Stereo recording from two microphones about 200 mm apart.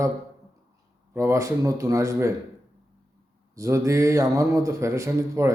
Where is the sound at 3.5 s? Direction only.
15° right (ahead or behind).